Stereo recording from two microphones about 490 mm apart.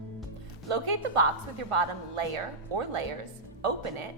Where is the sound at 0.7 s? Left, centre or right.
Right.